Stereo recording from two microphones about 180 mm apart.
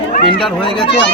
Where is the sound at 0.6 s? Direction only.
30° left (ahead or behind).